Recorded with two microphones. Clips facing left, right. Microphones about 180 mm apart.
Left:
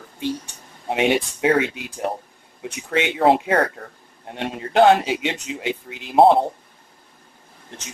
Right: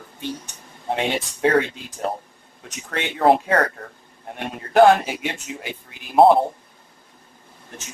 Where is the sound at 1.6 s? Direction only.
85° left.